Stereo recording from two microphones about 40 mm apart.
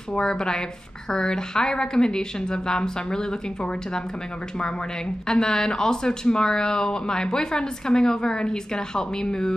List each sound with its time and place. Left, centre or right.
0.1 s speech: centre
5.3 s speech: centre